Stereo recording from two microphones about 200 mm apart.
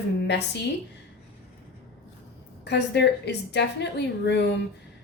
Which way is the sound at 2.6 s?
55° left (ahead or behind).